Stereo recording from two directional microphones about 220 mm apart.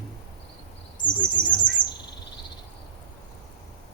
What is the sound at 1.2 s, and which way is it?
Bird, 5° left (ahead or behind).